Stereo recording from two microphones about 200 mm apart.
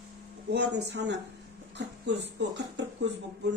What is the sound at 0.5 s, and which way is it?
Speech, 55° right (ahead or behind).